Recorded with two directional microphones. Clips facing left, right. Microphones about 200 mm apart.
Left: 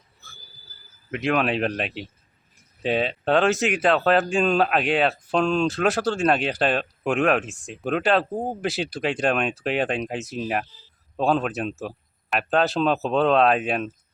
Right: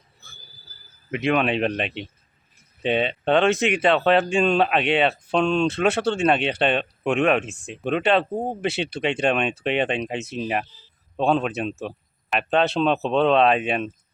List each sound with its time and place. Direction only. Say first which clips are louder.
1.1 s speech: right 1 dB; centre (ahead or behind)